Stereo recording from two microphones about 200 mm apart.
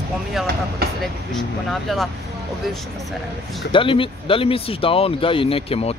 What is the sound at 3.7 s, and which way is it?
Speech, 25° left (ahead or behind).